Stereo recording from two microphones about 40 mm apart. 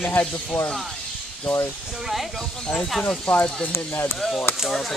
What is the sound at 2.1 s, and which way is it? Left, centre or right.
Speech, centre.